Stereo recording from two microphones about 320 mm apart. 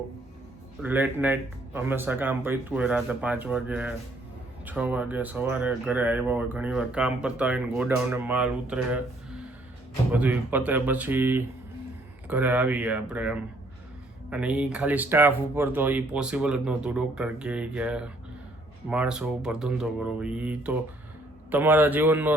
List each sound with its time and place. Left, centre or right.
0.8 s speech: centre
10.1 s speech: centre